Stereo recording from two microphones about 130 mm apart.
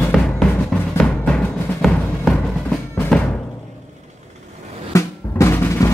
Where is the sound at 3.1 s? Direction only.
5° left (ahead or behind).